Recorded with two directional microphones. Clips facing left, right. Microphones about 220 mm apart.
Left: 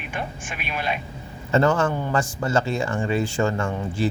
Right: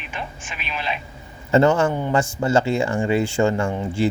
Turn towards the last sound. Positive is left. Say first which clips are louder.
# right 3 dB
turn(degrees=-25)  # may be behind; listen again after turning